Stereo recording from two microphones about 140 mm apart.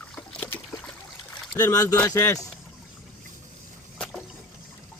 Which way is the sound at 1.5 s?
25° left (ahead or behind).